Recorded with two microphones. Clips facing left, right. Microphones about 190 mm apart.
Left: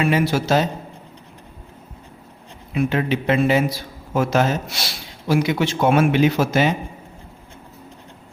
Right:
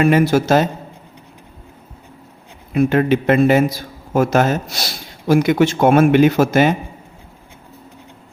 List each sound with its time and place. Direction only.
0.0 s a man's voice: 50° right (ahead or behind)
2.7 s a man's voice: 50° right (ahead or behind)